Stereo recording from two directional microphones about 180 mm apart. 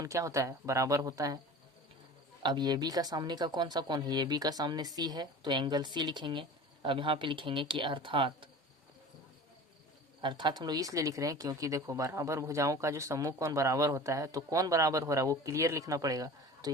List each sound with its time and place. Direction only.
0.0 s speech: 15° right (ahead or behind)
2.4 s speech: 25° right (ahead or behind)
10.2 s speech: 25° right (ahead or behind)